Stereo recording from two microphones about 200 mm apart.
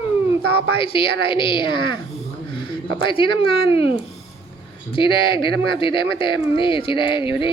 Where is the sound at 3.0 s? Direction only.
25° left (ahead or behind).